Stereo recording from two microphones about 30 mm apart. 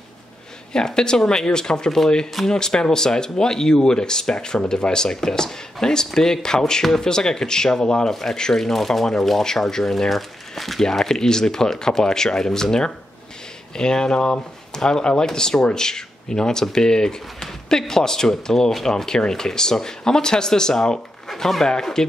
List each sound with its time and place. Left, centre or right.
0.7 s speech: left
8.1 s speech: centre
10.8 s speech: centre
21.3 s speech: centre